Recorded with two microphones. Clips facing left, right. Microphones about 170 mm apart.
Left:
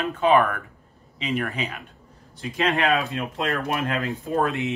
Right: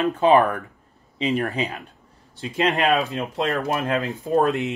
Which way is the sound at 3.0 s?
20° right (ahead or behind).